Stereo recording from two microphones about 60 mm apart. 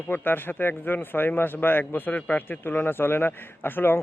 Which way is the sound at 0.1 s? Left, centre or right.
Left.